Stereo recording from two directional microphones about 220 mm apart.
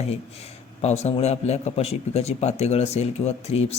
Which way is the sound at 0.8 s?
30° left (ahead or behind).